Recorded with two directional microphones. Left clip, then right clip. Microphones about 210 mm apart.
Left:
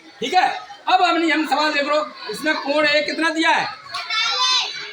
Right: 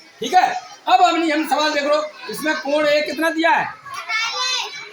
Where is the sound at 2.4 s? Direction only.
25° right (ahead or behind).